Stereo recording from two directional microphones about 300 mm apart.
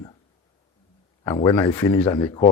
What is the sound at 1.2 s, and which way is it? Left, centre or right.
Speech, centre.